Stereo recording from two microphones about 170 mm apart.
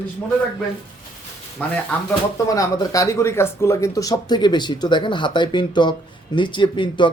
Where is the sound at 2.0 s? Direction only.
20° left (ahead or behind).